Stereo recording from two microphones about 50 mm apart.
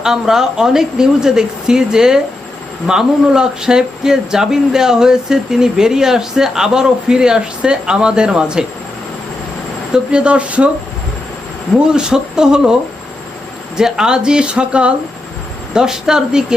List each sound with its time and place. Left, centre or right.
0.0 s speech: centre
9.9 s speech: centre
11.9 s speech: centre
13.7 s speech: centre